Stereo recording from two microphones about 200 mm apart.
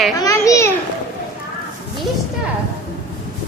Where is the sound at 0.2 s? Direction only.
15° left (ahead or behind).